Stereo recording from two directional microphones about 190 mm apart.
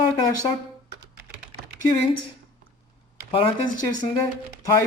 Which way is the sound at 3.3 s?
25° left (ahead or behind).